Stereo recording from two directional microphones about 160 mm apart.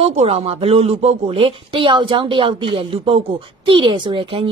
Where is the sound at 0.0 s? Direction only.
40° right (ahead or behind).